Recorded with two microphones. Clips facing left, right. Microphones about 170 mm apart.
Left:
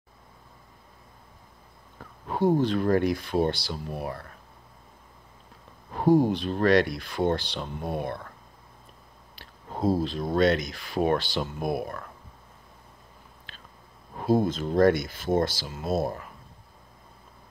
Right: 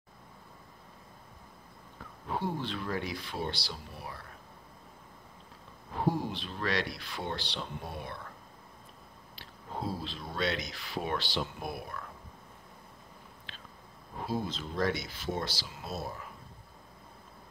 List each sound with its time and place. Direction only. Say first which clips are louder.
2.2 s speech: left 11 dB; 45° left (ahead or behind)
5.9 s speech: left 11 dB; 50° left (ahead or behind)
9.3 s speech: left 3 dB; 45° left (ahead or behind)
13.5 s biting: left 1 dB; 45° left (ahead or behind)
14.2 s speech: left 11 dB; 50° left (ahead or behind)